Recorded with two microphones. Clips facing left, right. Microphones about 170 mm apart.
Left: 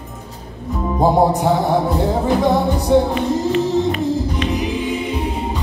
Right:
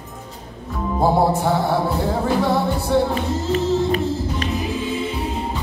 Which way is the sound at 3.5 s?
35° right (ahead or behind).